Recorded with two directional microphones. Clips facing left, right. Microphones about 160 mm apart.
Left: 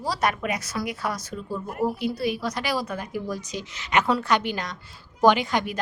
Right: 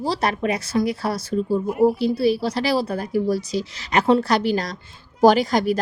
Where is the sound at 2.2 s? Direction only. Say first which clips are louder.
Right 7 dB; 30° right (ahead or behind).